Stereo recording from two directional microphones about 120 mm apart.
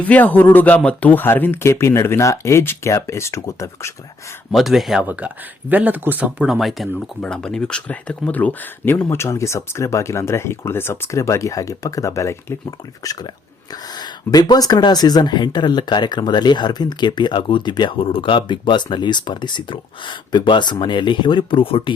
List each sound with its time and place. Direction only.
0.0 s speech: 15° left (ahead or behind)
4.5 s speech: centre (ahead or behind)
5.0 s speech: 15° right (ahead or behind); by 21.9 s 50° left (ahead or behind)